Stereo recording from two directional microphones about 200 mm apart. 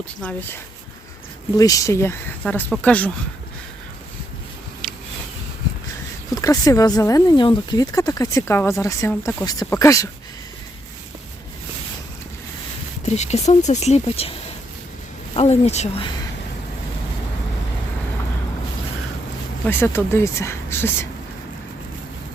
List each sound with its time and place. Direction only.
0.2 s speech: 10° left (ahead or behind)
4.8 s a sound: 5° left (ahead or behind)
6.3 s speech: 15° left (ahead or behind)
13.1 s speech: 35° left (ahead or behind)
15.4 s speech: 30° left (ahead or behind)
19.6 s speech: 10° left (ahead or behind)